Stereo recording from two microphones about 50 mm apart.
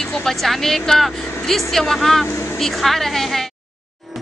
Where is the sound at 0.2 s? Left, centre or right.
Centre.